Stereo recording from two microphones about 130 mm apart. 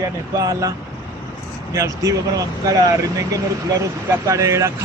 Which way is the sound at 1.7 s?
25° right (ahead or behind).